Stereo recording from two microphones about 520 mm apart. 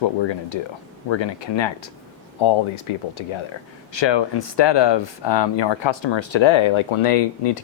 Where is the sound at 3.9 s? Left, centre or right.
Left.